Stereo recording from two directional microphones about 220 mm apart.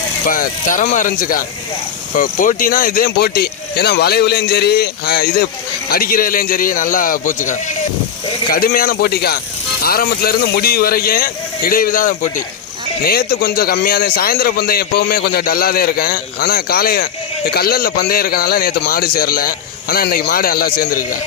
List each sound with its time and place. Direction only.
0.3 s a man's voice: 40° left (ahead or behind)